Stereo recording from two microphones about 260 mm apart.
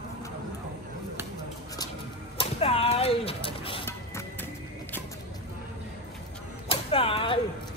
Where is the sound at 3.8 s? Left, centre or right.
Centre.